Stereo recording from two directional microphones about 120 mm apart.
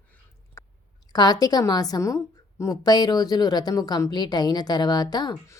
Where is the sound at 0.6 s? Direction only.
25° left (ahead or behind).